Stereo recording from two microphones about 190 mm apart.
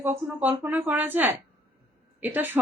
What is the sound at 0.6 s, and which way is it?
A woman's voice, 10° right (ahead or behind).